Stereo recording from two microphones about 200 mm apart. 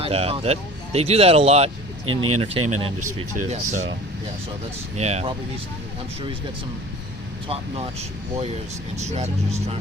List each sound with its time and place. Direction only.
0.0 s speech: 30° right (ahead or behind)
4.9 s speech: 35° right (ahead or behind)
7.4 s speech: 30° right (ahead or behind)
9.0 s speech: 35° right (ahead or behind)